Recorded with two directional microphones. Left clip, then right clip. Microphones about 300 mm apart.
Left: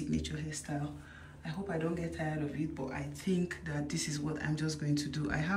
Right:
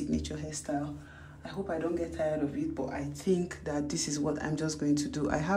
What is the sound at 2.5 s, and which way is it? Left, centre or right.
Speech, centre.